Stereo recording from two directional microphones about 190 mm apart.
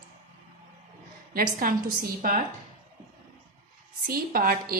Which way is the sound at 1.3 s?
50° right (ahead or behind).